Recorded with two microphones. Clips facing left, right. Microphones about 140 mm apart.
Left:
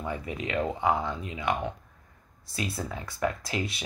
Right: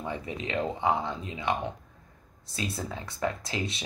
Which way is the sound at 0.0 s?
25° right (ahead or behind).